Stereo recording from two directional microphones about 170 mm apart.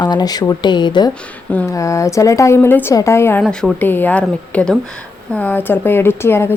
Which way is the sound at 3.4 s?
5° left (ahead or behind).